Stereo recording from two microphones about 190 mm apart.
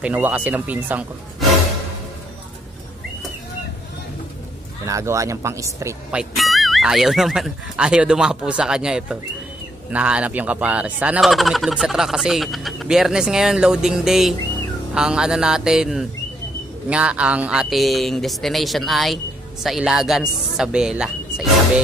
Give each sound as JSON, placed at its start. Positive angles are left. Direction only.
{"t": 0.0, "sound": "speech", "side_deg": -10}
{"t": 4.8, "sound": "speech", "side_deg": -15}
{"t": 6.1, "sound": "speech", "side_deg": 0}